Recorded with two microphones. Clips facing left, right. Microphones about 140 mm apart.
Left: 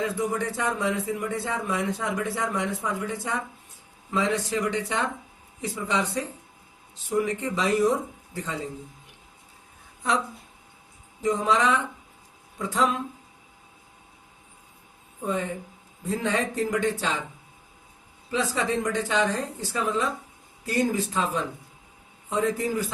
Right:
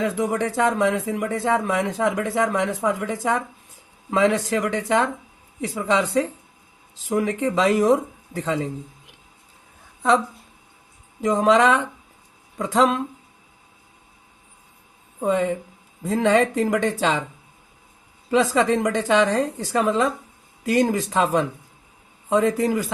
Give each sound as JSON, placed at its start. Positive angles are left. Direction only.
{"t": 0.0, "sound": "speech", "side_deg": -90}
{"t": 11.2, "sound": "speech", "side_deg": -90}
{"t": 15.2, "sound": "speech", "side_deg": -90}
{"t": 18.3, "sound": "speech", "side_deg": -90}